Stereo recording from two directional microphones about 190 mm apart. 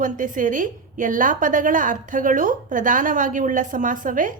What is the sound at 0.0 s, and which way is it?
A woman's voice, 45° right (ahead or behind).